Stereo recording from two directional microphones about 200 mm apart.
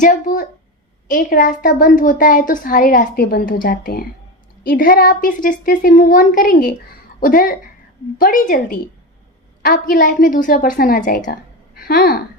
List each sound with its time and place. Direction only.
0.0 s a woman's voice: 40° left (ahead or behind)